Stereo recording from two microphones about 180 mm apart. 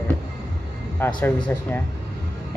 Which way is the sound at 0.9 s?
10° left (ahead or behind).